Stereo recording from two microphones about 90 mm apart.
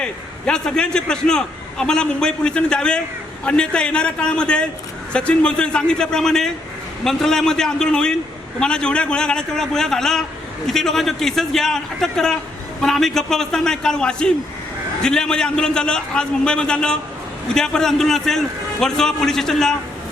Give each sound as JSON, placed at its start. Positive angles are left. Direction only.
{"t": 0.0, "sound": "a man's voice", "side_deg": 10}